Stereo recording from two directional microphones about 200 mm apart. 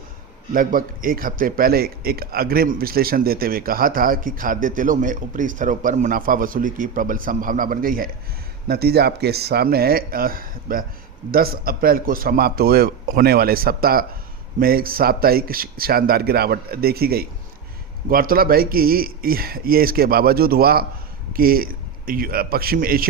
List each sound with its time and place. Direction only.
0.5 s speech: 45° right (ahead or behind)